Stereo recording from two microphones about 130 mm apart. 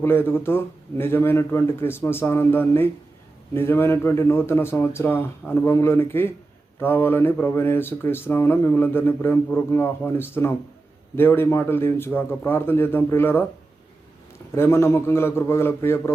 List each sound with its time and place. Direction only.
0.0 s a man's voice: 15° left (ahead or behind)
14.5 s a man's voice: 20° left (ahead or behind)